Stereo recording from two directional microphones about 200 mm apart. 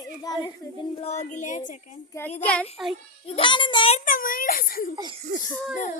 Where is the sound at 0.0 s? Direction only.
20° left (ahead or behind).